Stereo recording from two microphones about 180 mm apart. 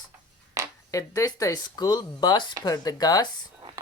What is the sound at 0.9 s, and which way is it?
Speech, 20° left (ahead or behind).